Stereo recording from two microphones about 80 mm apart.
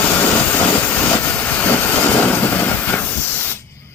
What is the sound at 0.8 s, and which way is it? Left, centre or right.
Vehicle, centre.